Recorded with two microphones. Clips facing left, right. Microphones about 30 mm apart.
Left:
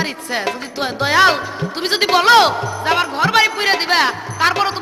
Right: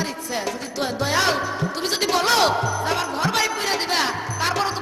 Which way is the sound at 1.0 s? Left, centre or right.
Left.